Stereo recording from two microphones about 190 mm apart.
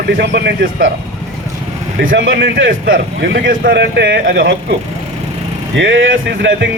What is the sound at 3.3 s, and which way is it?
Speech, 50° right (ahead or behind).